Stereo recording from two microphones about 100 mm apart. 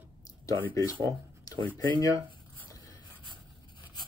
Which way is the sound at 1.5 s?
40° left (ahead or behind).